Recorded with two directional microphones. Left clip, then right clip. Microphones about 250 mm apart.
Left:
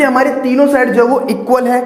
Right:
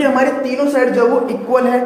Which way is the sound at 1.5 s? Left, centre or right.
Left.